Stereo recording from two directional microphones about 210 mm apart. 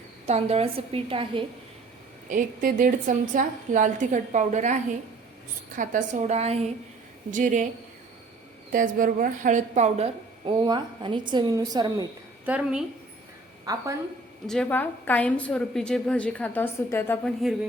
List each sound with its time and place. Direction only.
0.3 s a woman's voice: 30° right (ahead or behind)
2.3 s a woman's voice: 40° right (ahead or behind)
8.7 s a woman's voice: 40° right (ahead or behind); by 12.0 s 20° right (ahead or behind)
12.5 s a woman's voice: 5° right (ahead or behind)
13.7 s a woman's voice: 15° right (ahead or behind)
14.4 s a woman's voice: 5° left (ahead or behind)